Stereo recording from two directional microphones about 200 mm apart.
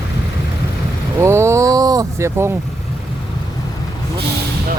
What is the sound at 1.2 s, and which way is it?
Speech, 15° right (ahead or behind).